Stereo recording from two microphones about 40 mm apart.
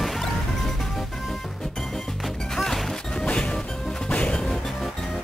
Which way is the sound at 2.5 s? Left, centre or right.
Centre.